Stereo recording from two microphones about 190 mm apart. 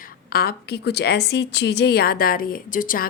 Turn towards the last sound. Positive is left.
turn(degrees=45)  # may be behind; listen again after turning